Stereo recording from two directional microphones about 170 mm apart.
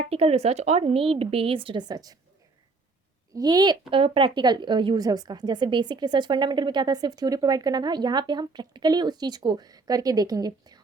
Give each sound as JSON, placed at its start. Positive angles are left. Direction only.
{"t": 0.1, "sound": "a woman's voice", "side_deg": -35}
{"t": 3.3, "sound": "speech", "side_deg": -25}